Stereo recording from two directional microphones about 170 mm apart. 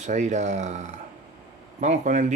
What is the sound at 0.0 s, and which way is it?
Speech, 45° right (ahead or behind).